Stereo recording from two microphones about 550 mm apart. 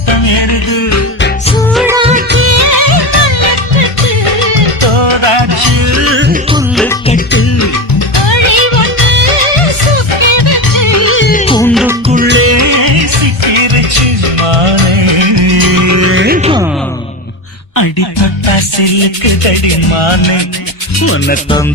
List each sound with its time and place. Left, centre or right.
0.1 s music: left
1.7 s music: centre; by 6.3 s right
6.5 s music: centre
7.9 s music: left; by 16.6 s centre
18.2 s music: left
21.0 s music: left